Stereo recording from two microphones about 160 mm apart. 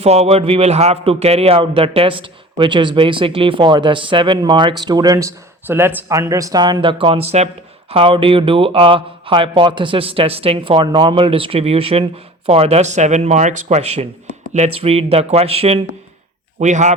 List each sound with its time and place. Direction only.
0.0 s speech: 40° right (ahead or behind)